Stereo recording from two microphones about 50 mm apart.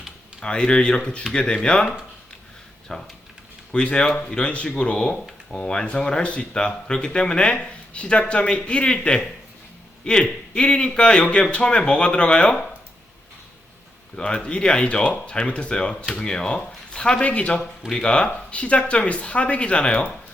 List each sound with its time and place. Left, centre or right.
0.3 s speech: centre
2.9 s speech: centre
14.2 s speech: left